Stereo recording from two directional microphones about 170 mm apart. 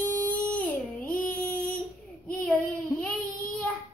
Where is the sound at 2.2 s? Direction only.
5° left (ahead or behind).